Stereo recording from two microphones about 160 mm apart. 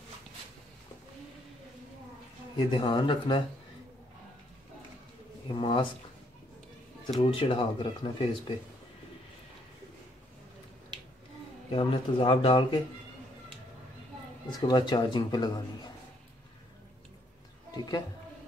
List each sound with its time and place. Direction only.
2.5 s speech: 30° left (ahead or behind)
5.5 s speech: 30° left (ahead or behind)
7.1 s speech: 35° left (ahead or behind)
11.7 s speech: 35° left (ahead or behind)
14.7 s a man's voice: 30° left (ahead or behind)
17.6 s speech: 25° left (ahead or behind)